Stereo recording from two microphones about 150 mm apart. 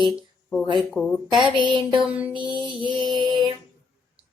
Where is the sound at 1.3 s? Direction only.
30° right (ahead or behind).